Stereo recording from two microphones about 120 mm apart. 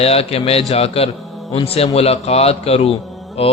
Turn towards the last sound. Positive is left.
turn(degrees=55)  # may be behind; listen again after turning